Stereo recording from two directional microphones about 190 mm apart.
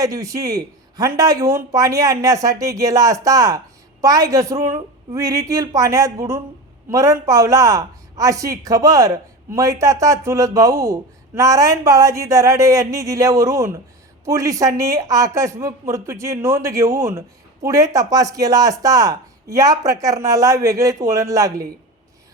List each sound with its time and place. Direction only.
0.0 s speech: 15° right (ahead or behind)